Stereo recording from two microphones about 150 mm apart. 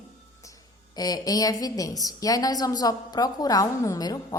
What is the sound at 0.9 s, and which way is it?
A woman's voice, 25° left (ahead or behind).